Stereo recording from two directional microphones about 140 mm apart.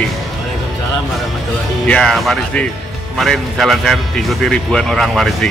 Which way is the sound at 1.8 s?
5° left (ahead or behind).